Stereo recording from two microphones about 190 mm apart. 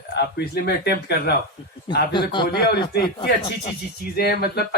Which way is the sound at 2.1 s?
25° left (ahead or behind).